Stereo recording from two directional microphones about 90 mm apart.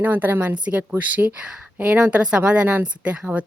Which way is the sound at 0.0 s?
20° right (ahead or behind).